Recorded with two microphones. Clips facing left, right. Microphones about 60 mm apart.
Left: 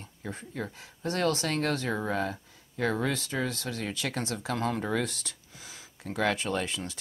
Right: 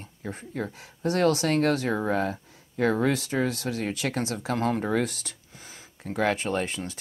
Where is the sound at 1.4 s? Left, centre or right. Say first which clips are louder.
Right 6 dB; right.